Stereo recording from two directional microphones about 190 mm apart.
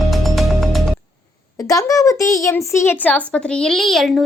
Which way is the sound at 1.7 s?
15° left (ahead or behind).